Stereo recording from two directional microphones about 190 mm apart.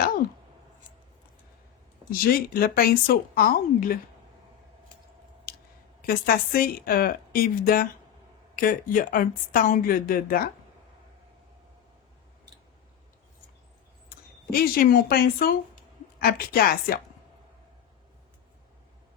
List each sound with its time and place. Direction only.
2.0 s speech: 50° left (ahead or behind)
5.5 s a sound: 50° left (ahead or behind)
6.1 s speech: 50° left (ahead or behind)
14.1 s speech: 50° left (ahead or behind)